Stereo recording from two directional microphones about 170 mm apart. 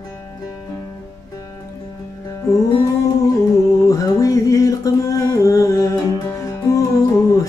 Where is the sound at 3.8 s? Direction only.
20° left (ahead or behind).